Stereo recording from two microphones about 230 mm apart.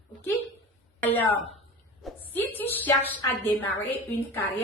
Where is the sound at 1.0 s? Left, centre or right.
Centre.